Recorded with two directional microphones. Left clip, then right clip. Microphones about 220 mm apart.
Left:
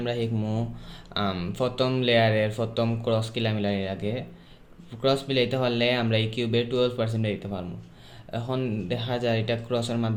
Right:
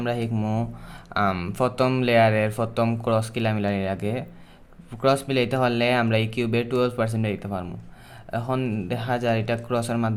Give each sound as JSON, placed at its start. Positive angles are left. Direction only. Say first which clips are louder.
{"t": 0.0, "sound": "speech", "louder": "right 2 dB", "side_deg": -20}